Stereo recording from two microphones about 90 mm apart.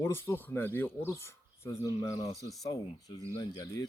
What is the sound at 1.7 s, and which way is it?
Speech, 45° left (ahead or behind).